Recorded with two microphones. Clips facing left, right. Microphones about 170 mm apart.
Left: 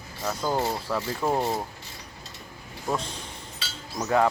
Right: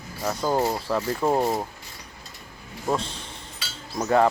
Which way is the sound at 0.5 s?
20° right (ahead or behind).